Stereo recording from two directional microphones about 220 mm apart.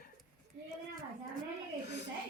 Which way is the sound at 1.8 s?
50° left (ahead or behind).